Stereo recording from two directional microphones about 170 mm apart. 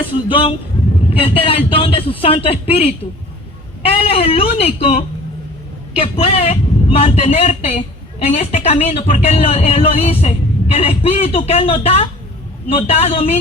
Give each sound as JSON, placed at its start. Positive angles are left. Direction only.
{"t": 0.0, "sound": "a woman's voice", "side_deg": 30}